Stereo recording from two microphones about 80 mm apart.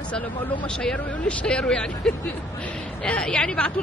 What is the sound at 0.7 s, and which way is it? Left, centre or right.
Speech, centre.